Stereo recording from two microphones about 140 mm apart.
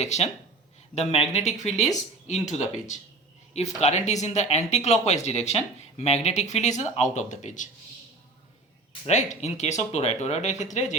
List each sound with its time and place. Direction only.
0.0 s speech: 50° left (ahead or behind)
9.0 s speech: 55° left (ahead or behind)